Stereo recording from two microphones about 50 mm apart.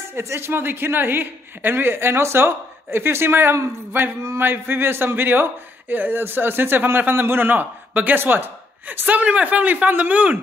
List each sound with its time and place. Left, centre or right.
0.1 s speech: right
0.5 s speech: right